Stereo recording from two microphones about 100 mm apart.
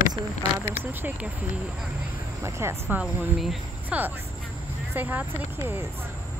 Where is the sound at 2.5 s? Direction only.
25° right (ahead or behind).